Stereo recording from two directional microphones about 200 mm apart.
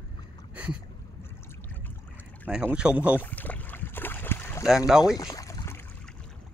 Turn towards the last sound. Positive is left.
turn(degrees=15)  # may be behind; listen again after turning